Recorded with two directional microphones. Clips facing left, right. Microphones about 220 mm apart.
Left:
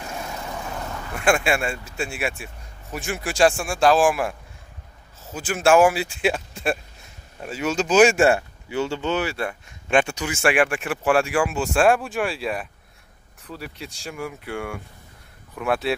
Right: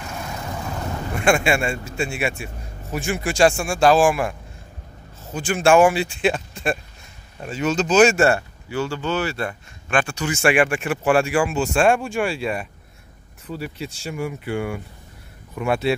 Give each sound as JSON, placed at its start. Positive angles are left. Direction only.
{"t": 1.2, "sound": "a man's voice", "side_deg": 5}
{"t": 9.8, "sound": "speech", "side_deg": 20}
{"t": 10.2, "sound": "a man's voice", "side_deg": 5}